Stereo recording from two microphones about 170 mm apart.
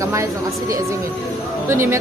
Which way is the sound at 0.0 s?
20° right (ahead or behind).